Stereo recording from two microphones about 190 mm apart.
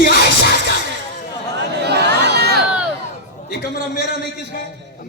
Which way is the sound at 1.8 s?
60° right (ahead or behind).